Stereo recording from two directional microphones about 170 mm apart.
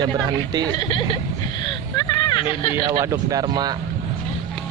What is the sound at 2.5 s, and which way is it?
Speech, 30° left (ahead or behind).